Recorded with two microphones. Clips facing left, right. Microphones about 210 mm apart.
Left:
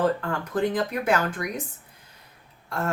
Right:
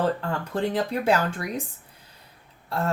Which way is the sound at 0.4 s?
30° right (ahead or behind).